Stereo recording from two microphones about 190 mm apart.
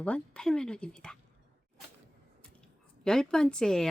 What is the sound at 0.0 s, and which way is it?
A woman's voice, 5° left (ahead or behind).